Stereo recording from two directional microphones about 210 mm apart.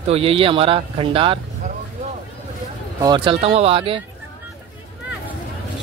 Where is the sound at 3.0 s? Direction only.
20° right (ahead or behind).